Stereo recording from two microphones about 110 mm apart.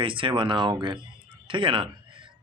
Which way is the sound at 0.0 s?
50° right (ahead or behind).